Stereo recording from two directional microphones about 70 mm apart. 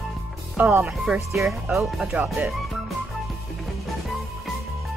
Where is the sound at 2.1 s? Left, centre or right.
Right.